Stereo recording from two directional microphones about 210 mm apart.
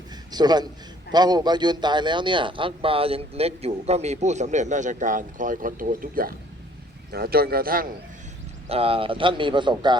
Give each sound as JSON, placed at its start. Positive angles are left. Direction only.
{"t": 0.3, "sound": "a man's voice", "side_deg": -20}
{"t": 8.7, "sound": "a man's voice", "side_deg": -25}